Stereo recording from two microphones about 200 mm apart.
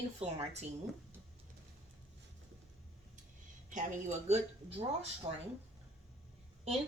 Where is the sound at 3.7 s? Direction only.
35° right (ahead or behind).